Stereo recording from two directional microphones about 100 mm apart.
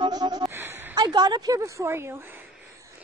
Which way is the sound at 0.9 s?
45° right (ahead or behind).